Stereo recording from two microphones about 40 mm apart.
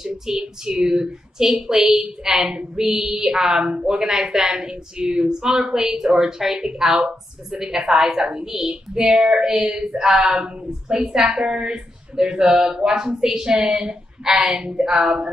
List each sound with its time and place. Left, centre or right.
0.0 s a woman's voice: centre